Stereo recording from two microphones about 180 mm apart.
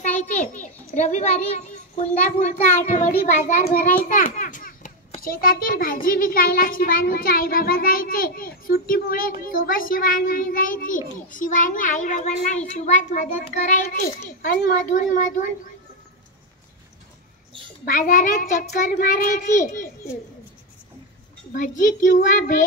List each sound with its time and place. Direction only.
0.0 s a child's voice: 40° left (ahead or behind)
17.8 s a child's voice: 50° left (ahead or behind)
21.5 s a child's voice: 45° left (ahead or behind)